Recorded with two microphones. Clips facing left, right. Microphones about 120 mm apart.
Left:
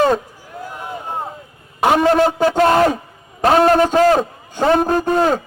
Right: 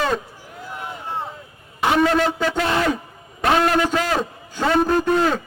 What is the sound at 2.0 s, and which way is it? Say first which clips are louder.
A man's voice: left 3 dB; 40° left (ahead or behind).